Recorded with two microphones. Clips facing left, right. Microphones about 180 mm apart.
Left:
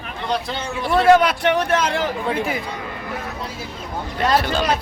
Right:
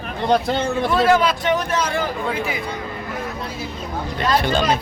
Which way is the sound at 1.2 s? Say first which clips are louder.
Left 1 dB; 60° left (ahead or behind).